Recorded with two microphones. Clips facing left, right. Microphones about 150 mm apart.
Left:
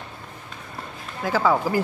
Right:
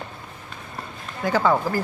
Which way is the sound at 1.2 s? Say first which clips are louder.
Right 1 dB; centre (ahead or behind).